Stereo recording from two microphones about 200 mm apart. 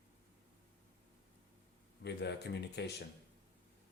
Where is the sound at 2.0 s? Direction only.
60° left (ahead or behind).